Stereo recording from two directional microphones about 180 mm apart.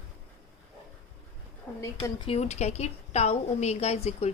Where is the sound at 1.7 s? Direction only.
5° left (ahead or behind).